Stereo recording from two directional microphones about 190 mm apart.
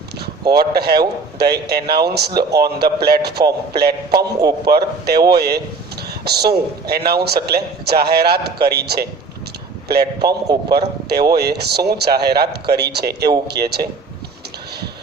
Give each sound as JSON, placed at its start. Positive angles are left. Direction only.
{"t": 0.5, "sound": "speech", "side_deg": -60}
{"t": 4.2, "sound": "a man's voice", "side_deg": -20}
{"t": 4.7, "sound": "speech", "side_deg": -55}